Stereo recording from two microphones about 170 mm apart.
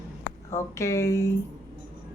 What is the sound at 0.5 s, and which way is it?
Speech, 15° left (ahead or behind).